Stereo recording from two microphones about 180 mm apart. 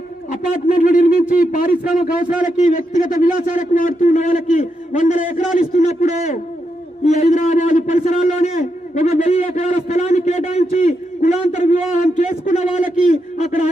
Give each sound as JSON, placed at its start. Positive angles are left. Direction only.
{"t": 0.3, "sound": "a man's voice", "side_deg": 50}